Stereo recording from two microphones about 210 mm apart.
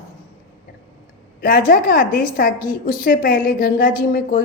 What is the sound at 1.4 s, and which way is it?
A woman's voice, 40° left (ahead or behind).